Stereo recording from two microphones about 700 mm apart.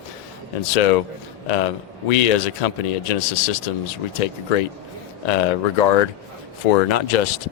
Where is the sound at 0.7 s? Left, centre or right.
Left.